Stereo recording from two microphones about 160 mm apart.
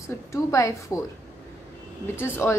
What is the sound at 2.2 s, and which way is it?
Speech, 15° left (ahead or behind).